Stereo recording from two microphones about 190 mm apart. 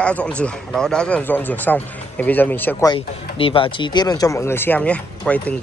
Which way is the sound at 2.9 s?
30° left (ahead or behind).